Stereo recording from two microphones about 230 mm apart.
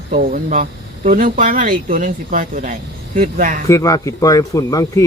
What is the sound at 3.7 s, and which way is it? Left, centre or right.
Speech, centre.